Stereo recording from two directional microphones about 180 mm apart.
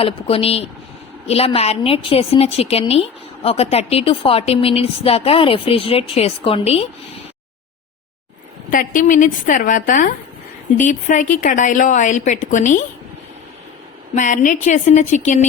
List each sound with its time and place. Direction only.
0.0 s a woman's voice: 30° left (ahead or behind)
8.7 s a woman's voice: 50° left (ahead or behind)
14.2 s a woman's voice: 45° left (ahead or behind)